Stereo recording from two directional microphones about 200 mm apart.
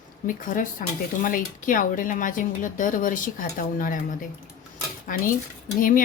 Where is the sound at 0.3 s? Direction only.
40° left (ahead or behind).